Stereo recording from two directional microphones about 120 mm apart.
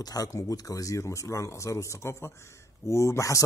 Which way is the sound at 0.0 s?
30° left (ahead or behind).